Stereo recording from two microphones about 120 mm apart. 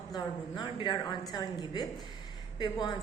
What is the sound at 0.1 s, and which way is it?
A woman's voice, 40° left (ahead or behind).